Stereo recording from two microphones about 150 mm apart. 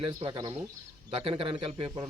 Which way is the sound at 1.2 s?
40° right (ahead or behind).